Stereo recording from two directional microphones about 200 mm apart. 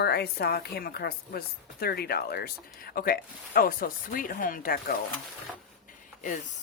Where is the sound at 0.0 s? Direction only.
50° left (ahead or behind).